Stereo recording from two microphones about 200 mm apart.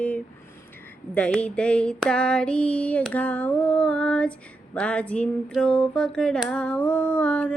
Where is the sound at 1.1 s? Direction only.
5° left (ahead or behind).